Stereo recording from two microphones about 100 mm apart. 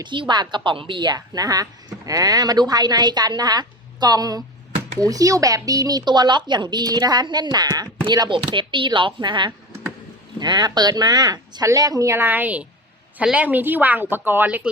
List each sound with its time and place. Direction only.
0.0 s a woman's voice: 50° right (ahead or behind)
8.3 s speech: 55° right (ahead or behind); by 14.7 s 15° right (ahead or behind)